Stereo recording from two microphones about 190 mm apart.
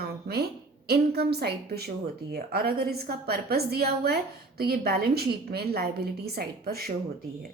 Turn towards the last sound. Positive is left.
turn(degrees=-55)  # may be behind; listen again after turning